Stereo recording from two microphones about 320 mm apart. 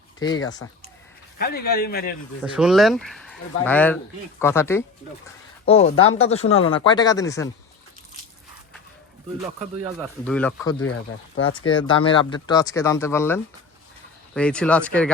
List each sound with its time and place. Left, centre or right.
0.2 s speech: centre
1.4 s a man's voice: left
2.4 s speech: centre
5.2 s a man's voice: centre
10.2 s speech: centre